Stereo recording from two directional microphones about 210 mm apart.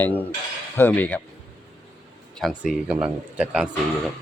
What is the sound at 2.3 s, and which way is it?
Speech, centre (ahead or behind).